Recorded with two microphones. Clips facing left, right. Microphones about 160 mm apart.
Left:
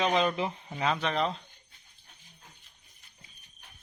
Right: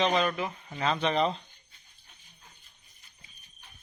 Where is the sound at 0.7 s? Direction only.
5° left (ahead or behind).